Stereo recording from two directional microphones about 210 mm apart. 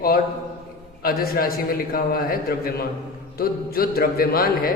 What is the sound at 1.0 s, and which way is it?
A man's voice, 45° left (ahead or behind).